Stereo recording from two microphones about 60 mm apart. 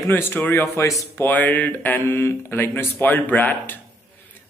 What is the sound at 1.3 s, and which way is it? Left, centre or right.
Speech, left.